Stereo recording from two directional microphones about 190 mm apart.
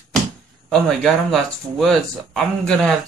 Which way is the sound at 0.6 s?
Centre (ahead or behind).